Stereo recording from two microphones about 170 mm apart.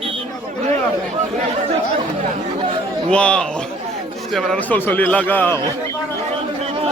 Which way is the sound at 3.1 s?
5° left (ahead or behind).